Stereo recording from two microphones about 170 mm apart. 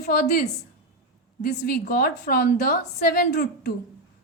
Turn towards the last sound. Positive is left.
turn(degrees=65)  # may be behind; listen again after turning